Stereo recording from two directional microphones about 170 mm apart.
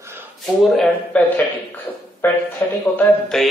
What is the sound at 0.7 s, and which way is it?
A man's voice, 10° left (ahead or behind).